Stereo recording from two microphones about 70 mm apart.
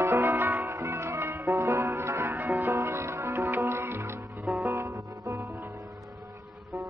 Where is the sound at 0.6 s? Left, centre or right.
Right.